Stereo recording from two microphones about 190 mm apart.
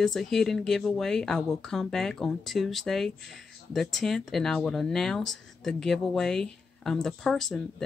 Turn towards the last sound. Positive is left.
turn(degrees=0)  # may be behind; listen again after turning